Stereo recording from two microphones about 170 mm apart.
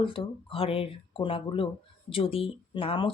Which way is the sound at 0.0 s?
30° left (ahead or behind).